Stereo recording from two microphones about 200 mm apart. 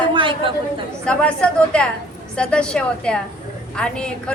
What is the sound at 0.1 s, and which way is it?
Chatter, 25° right (ahead or behind).